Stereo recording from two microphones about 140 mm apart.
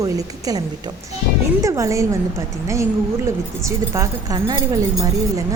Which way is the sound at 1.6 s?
20° right (ahead or behind).